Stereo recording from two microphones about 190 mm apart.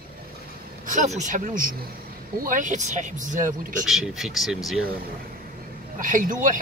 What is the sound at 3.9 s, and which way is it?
Speech, centre (ahead or behind).